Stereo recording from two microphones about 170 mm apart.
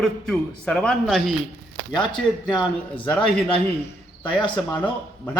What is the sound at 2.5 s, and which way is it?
A man's voice, 30° left (ahead or behind).